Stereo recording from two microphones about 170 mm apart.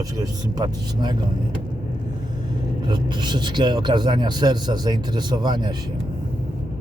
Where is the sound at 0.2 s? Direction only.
25° right (ahead or behind).